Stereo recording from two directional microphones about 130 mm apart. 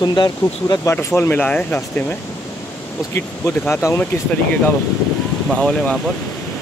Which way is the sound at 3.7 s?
20° left (ahead or behind).